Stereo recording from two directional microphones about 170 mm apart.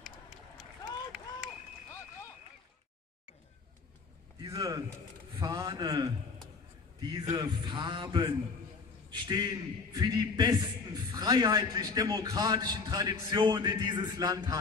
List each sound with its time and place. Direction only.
4.4 s a sound: 20° right (ahead or behind)
5.4 s mantra: 25° right (ahead or behind)
7.0 s a man's voice: 20° right (ahead or behind)